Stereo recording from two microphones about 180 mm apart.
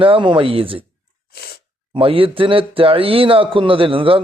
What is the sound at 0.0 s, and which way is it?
Speech, 30° right (ahead or behind).